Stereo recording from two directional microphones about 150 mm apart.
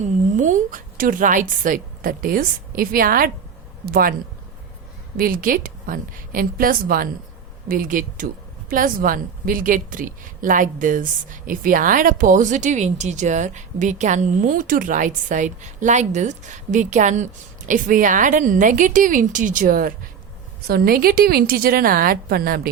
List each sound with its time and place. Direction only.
0.0 s a woman's voice: 55° right (ahead or behind)
3.8 s a woman's voice: 80° right
5.1 s a woman's voice: 70° right (ahead or behind)
20.7 s a woman's voice: 85° right